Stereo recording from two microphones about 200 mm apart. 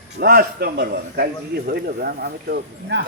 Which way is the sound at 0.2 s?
50° right (ahead or behind).